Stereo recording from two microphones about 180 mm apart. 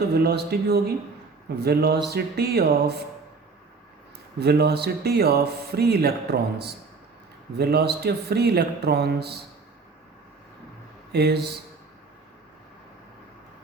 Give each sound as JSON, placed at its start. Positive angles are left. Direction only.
{"t": 0.0, "sound": "speech", "side_deg": -60}
{"t": 4.4, "sound": "speech", "side_deg": -65}
{"t": 11.1, "sound": "speech", "side_deg": -65}